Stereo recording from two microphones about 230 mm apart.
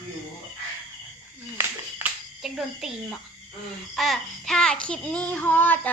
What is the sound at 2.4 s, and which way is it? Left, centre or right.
Child singing, centre.